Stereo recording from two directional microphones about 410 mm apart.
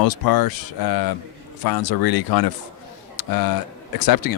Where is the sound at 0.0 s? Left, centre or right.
Left.